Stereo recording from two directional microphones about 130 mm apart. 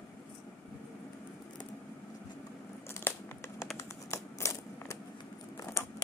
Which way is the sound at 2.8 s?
20° left (ahead or behind).